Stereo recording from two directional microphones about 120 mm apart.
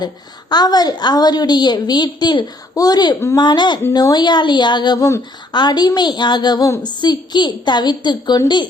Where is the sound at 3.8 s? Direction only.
30° left (ahead or behind).